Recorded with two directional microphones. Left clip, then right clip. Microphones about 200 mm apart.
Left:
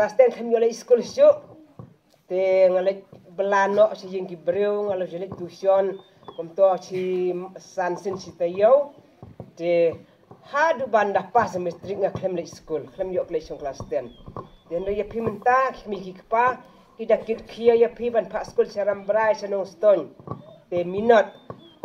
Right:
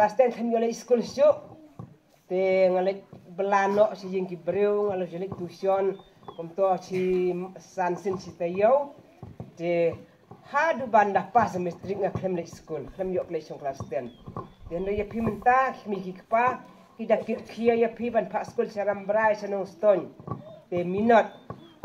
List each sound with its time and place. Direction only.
0.0 s speech: 50° left (ahead or behind)